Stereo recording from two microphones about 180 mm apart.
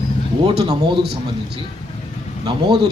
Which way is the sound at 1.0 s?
65° right (ahead or behind).